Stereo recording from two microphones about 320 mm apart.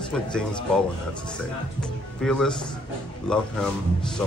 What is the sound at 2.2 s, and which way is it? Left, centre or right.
Speech, centre.